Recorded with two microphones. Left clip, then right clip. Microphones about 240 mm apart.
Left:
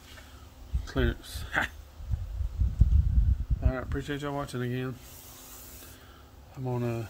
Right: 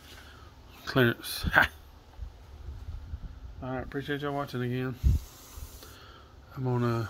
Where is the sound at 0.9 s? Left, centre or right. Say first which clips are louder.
Right 6 dB; right.